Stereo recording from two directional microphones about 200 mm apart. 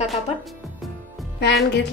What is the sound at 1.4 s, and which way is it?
Speech, 55° left (ahead or behind).